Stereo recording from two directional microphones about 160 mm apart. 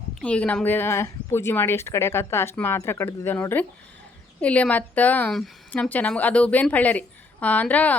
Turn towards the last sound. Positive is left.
turn(degrees=10)  # may be behind; listen again after turning